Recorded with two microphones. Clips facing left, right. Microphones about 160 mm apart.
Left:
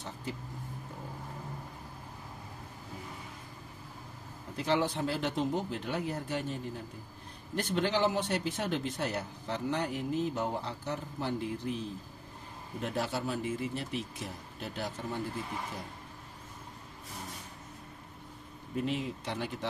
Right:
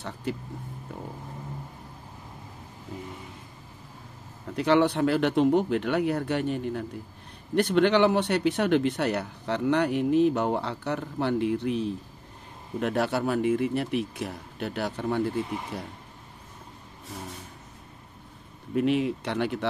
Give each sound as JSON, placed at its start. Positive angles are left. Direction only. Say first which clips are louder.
{"t": 0.0, "sound": "speech", "louder": "right 7 dB", "side_deg": -70}
{"t": 4.6, "sound": "speech", "louder": "right 8 dB", "side_deg": -70}
{"t": 18.8, "sound": "speech", "louder": "right 9 dB", "side_deg": -70}